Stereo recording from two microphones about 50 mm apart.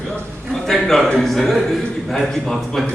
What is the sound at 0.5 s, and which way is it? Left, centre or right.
A man's voice, centre.